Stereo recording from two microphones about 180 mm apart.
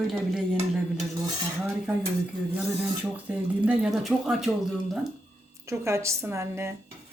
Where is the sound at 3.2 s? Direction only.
5° right (ahead or behind).